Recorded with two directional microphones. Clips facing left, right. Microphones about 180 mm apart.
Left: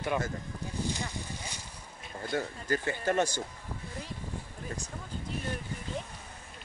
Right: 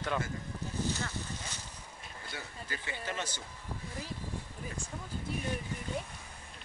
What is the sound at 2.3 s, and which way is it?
Speech, 45° left (ahead or behind).